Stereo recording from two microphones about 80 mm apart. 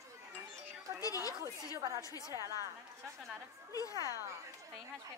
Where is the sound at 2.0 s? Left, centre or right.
Left.